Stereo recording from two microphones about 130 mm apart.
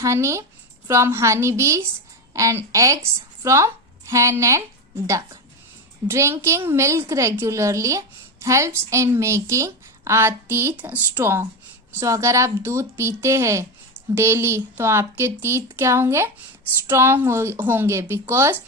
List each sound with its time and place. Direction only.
0.0 s a woman's voice: 20° right (ahead or behind)